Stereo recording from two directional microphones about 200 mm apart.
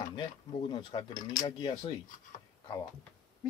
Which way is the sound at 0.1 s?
20° left (ahead or behind).